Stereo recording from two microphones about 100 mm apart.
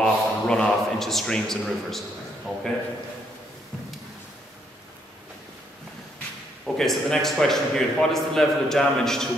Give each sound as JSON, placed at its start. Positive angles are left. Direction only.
{"t": 0.0, "sound": "a man's voice", "side_deg": 5}
{"t": 6.8, "sound": "a man's voice", "side_deg": 5}